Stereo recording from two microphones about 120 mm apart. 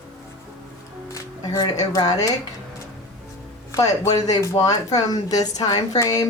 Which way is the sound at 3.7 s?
30° left (ahead or behind).